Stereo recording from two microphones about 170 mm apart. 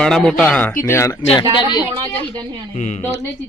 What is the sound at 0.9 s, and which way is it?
Speech, 15° left (ahead or behind).